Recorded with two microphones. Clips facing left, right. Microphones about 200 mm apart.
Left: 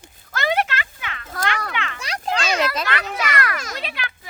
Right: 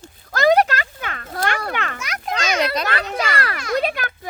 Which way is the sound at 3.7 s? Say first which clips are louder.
Right 10 dB; 45° right (ahead or behind).